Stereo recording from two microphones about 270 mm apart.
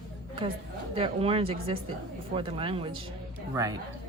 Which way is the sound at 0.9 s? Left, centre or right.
Right.